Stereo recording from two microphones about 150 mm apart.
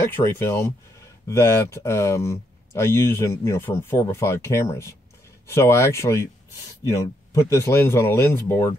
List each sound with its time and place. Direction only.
0.0 s speech: 15° left (ahead or behind)